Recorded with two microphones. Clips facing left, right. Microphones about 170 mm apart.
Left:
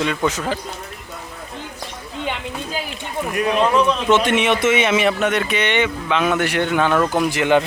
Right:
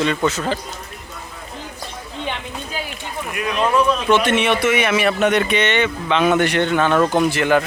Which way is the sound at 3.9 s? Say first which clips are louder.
Even; 20° left (ahead or behind).